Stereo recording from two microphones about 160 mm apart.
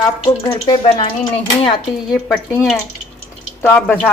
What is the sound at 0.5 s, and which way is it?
Speech, 25° left (ahead or behind).